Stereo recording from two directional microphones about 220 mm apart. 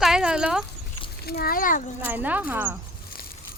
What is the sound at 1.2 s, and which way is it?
Speech, 45° left (ahead or behind).